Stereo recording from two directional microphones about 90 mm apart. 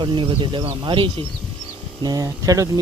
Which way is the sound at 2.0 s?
40° right (ahead or behind).